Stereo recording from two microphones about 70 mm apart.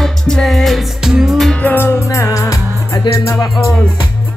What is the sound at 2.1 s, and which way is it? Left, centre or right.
Music, left.